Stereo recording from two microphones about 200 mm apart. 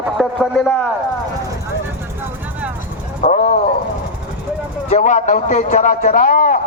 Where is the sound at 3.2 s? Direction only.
35° left (ahead or behind).